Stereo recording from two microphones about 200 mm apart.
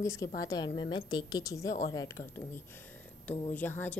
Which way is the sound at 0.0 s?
15° left (ahead or behind).